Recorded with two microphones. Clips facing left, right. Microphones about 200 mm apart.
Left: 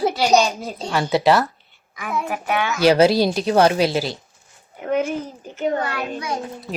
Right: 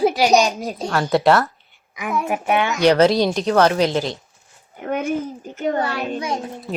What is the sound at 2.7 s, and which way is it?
Speech, 5° left (ahead or behind).